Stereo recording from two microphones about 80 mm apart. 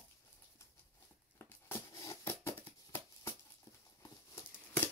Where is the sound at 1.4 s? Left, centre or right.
Left.